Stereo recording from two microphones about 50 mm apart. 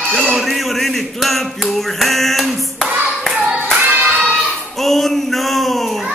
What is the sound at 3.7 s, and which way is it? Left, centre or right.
Singing, right.